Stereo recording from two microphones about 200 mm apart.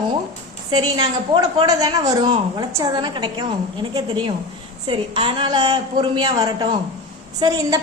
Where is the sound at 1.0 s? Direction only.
20° right (ahead or behind).